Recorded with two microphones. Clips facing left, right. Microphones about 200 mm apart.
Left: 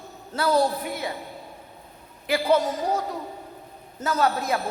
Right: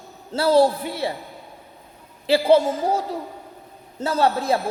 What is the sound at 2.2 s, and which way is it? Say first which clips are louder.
Music: right 5 dB; 30° right (ahead or behind).